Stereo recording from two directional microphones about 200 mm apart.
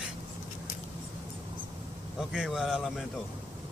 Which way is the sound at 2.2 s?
Centre (ahead or behind).